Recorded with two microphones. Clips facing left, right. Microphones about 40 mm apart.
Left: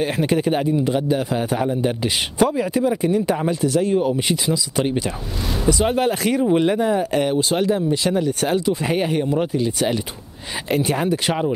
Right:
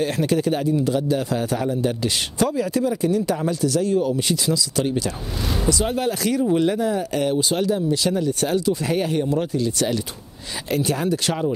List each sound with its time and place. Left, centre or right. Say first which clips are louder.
0.0 s a man's voice: left 1 dB; left